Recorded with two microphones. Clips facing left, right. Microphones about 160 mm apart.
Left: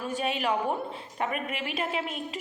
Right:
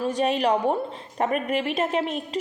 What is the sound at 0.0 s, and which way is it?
A woman's voice, 40° right (ahead or behind).